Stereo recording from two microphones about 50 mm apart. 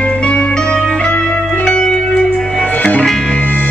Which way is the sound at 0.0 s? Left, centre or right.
Left.